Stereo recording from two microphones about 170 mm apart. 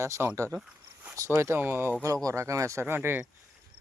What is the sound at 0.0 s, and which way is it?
Speech, 15° right (ahead or behind).